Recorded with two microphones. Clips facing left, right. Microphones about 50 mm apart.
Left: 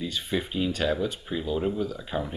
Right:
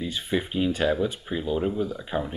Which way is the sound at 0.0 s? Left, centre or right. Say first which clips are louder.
Right 2 dB; centre.